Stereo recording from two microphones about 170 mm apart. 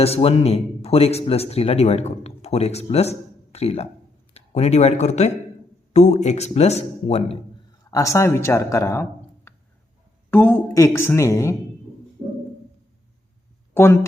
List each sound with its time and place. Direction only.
0.0 s speech: 35° left (ahead or behind)
7.9 s speech: 20° left (ahead or behind)
13.7 s speech: 15° left (ahead or behind)